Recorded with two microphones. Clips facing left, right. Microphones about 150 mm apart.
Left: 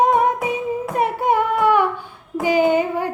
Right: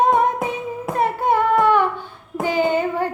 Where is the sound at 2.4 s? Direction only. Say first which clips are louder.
Left 3 dB; 10° left (ahead or behind).